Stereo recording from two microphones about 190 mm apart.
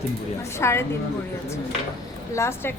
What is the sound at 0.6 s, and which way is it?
Speech, 15° left (ahead or behind).